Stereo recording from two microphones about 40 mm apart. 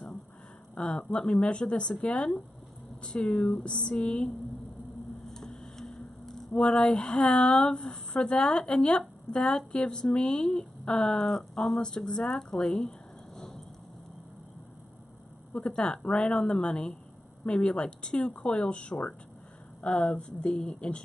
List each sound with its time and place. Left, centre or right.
0.7 s speech: left
5.3 s tick-tock: centre
6.5 s speech: left
15.5 s speech: left